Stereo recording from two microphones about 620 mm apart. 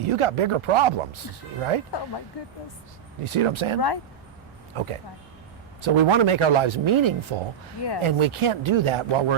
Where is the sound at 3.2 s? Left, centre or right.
Right.